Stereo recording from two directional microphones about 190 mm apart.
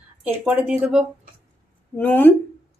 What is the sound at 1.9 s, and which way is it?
Speech, 10° left (ahead or behind).